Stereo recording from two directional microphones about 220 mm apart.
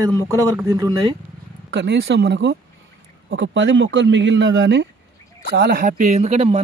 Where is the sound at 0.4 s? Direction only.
15° right (ahead or behind).